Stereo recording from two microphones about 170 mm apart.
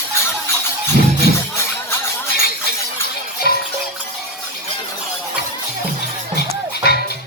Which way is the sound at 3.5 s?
70° left (ahead or behind).